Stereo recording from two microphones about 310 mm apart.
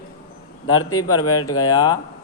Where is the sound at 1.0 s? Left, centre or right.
Left.